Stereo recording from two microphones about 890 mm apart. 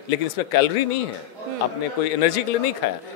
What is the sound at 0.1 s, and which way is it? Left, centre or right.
Speech, left.